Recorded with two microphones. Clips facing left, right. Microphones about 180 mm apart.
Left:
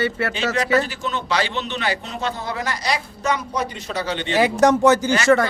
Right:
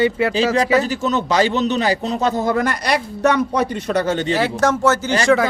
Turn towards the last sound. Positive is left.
turn(degrees=0)  # may be behind; listen again after turning